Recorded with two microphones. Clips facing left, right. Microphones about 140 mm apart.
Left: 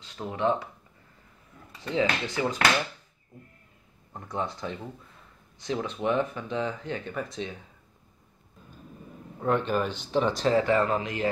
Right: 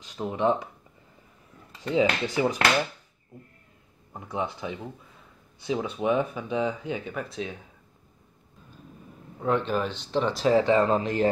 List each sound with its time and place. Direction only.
0.0 s speech: 15° right (ahead or behind)
1.8 s speech: 15° right (ahead or behind)
4.1 s speech: 10° right (ahead or behind)
9.4 s speech: centre (ahead or behind)
10.5 s speech: 15° right (ahead or behind)
11.0 s speech: 40° right (ahead or behind)